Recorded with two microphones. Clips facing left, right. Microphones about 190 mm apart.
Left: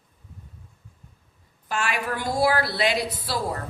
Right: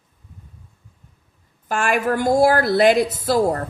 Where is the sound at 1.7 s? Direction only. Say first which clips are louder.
Right 8 dB; 50° right (ahead or behind).